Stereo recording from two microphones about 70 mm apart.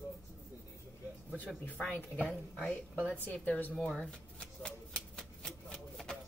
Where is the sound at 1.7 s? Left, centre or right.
Left.